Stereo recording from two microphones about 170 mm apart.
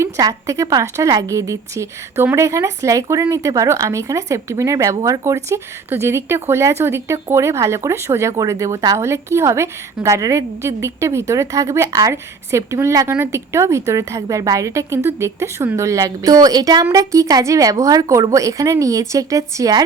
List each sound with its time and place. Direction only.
0.0 s a woman's voice: 20° right (ahead or behind)